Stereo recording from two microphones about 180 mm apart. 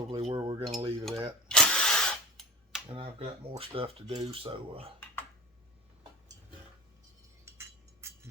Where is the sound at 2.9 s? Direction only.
30° right (ahead or behind).